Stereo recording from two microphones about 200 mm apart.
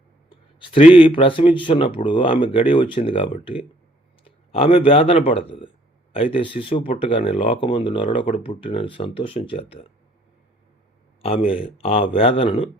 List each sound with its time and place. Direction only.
0.3 s a sound: 25° left (ahead or behind)
0.9 s speech: 25° left (ahead or behind)
11.2 s speech: 30° left (ahead or behind)